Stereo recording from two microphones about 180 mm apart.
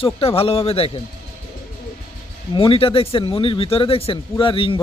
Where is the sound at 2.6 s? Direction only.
30° left (ahead or behind).